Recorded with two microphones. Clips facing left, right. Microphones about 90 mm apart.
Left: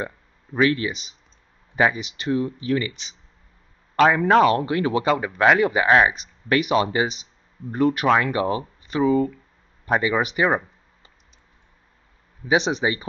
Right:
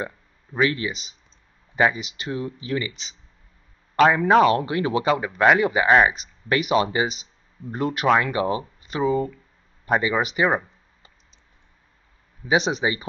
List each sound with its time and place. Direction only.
0.5 s speech: 5° right (ahead or behind)
4.6 s speech: 15° right (ahead or behind)
5.0 s speech: 5° right (ahead or behind)
7.7 s speech: 15° right (ahead or behind)
8.1 s speech: 5° right (ahead or behind)
8.5 s speech: 20° right (ahead or behind)
9.8 s speech: centre (ahead or behind)
12.4 s speech: centre (ahead or behind)